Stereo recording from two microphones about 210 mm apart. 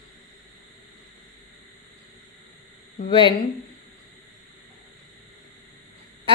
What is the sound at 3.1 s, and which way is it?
Speech, 25° left (ahead or behind).